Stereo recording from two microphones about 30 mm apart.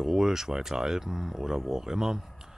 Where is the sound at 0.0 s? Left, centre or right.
Centre.